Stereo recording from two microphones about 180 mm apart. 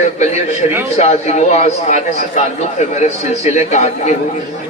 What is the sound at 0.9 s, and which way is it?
A man's voice, 40° left (ahead or behind).